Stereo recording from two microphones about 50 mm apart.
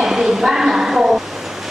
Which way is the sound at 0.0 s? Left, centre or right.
Centre.